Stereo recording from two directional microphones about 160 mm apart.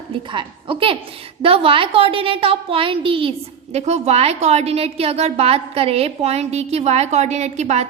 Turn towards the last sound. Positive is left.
turn(degrees=-45)  # may be behind; listen again after turning